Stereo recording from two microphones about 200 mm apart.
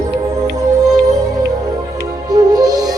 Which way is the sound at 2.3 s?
20° right (ahead or behind).